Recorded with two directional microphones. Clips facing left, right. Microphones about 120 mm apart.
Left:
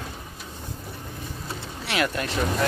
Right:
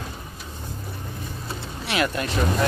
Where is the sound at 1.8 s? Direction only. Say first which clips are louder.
Right 1 dB; 20° right (ahead or behind).